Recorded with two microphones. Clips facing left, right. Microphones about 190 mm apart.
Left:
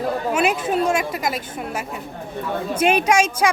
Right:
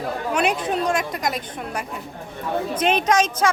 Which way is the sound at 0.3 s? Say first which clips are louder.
Left 1 dB; 5° left (ahead or behind).